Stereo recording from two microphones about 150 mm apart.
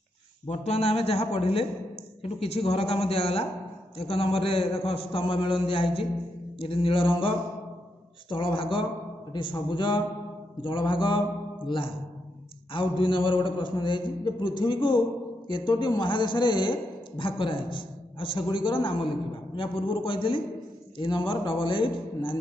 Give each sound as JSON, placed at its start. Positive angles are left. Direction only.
{"t": 0.5, "sound": "a man's voice", "side_deg": 45}